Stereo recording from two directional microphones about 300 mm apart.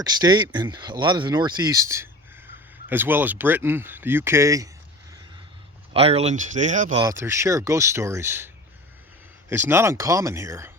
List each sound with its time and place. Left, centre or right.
0.0 s speech: centre
5.9 s speech: centre
7.0 s speech: centre
9.5 s speech: centre